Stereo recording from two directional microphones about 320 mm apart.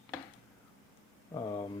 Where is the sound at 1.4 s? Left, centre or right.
Centre.